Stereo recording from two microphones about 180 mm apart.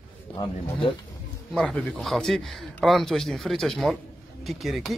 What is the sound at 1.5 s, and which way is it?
A man's voice, 5° left (ahead or behind).